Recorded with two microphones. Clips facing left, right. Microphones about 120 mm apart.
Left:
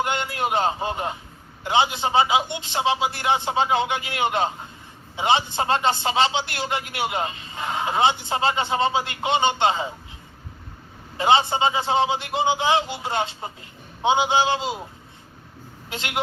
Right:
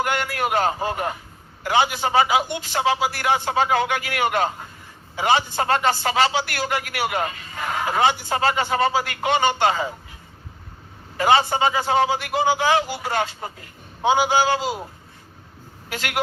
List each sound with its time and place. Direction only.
0.0 s a man's voice: 25° left (ahead or behind)
11.2 s a man's voice: 25° left (ahead or behind)
15.9 s a man's voice: 25° left (ahead or behind)